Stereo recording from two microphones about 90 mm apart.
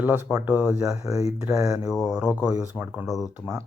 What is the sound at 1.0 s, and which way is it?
Speech, 40° right (ahead or behind).